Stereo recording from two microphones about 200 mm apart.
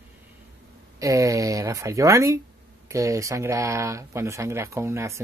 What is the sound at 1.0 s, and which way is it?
Speech, 15° right (ahead or behind).